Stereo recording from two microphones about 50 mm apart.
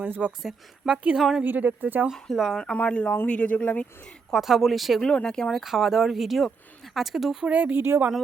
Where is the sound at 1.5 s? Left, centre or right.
Right.